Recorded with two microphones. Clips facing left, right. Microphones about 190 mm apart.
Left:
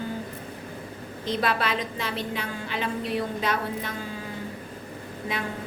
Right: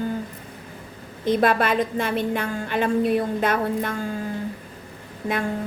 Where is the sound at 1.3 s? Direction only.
50° right (ahead or behind).